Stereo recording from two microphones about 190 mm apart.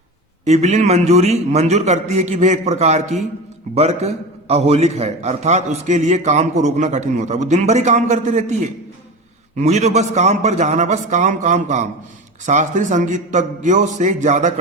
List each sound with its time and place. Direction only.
0.4 s a man's voice: 35° right (ahead or behind)